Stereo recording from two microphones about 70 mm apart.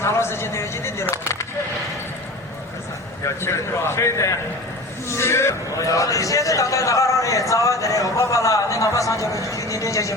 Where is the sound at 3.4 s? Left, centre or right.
Left.